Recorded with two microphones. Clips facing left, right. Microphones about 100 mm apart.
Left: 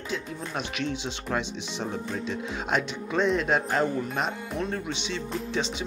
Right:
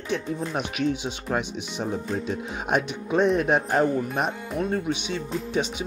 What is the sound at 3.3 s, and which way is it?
Speech, 15° right (ahead or behind).